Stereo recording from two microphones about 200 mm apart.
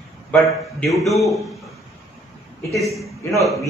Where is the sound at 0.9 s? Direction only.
Centre (ahead or behind).